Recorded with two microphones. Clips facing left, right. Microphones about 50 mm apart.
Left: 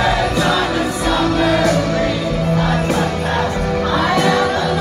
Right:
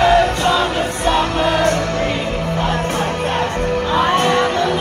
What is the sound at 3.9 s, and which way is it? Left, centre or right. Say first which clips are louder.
Chatter: right 1 dB; right.